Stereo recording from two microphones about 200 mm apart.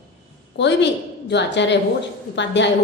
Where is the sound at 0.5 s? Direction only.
60° left (ahead or behind).